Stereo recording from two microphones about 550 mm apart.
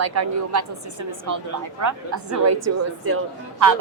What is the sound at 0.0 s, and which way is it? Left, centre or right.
A woman's voice, right.